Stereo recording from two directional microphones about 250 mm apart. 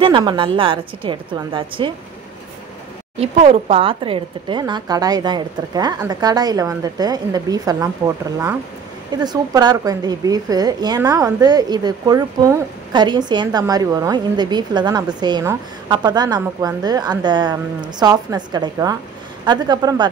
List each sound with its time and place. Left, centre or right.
0.0 s a woman's voice: centre
3.2 s a woman's voice: right